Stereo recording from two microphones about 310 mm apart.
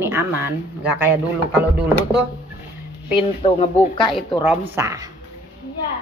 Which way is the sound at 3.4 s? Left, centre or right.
Centre.